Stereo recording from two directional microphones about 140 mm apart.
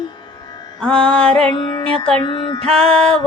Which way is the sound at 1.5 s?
35° left (ahead or behind).